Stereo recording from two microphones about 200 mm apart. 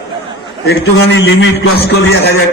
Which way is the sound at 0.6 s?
60° left (ahead or behind).